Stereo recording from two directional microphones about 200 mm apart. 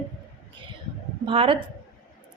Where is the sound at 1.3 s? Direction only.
25° right (ahead or behind).